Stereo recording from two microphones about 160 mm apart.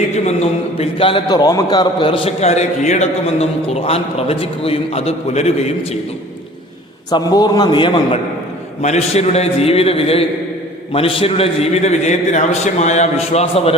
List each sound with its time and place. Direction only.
0.8 s a man's voice: 35° left (ahead or behind)
7.1 s a man's voice: 25° left (ahead or behind)
8.8 s a man's voice: 45° left (ahead or behind)